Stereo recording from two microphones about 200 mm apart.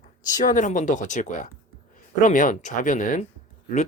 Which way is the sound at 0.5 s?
40° left (ahead or behind).